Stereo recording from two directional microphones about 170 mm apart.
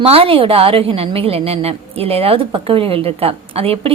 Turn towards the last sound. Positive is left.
turn(degrees=-35)  # may be behind; listen again after turning